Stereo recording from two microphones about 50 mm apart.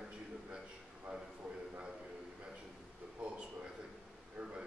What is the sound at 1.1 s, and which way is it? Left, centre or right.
Speech, right.